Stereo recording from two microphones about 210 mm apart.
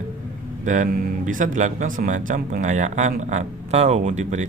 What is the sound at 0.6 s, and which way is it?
Speech, 35° right (ahead or behind).